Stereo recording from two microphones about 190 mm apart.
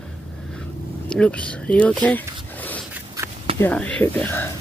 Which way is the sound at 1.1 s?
5° left (ahead or behind).